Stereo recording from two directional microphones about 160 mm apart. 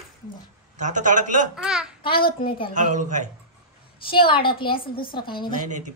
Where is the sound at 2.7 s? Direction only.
50° right (ahead or behind).